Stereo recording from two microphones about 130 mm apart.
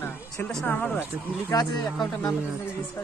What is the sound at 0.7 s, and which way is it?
Speech, 15° left (ahead or behind).